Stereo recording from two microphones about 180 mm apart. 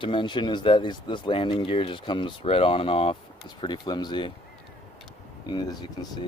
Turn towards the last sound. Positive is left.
turn(degrees=20)  # may be behind; listen again after turning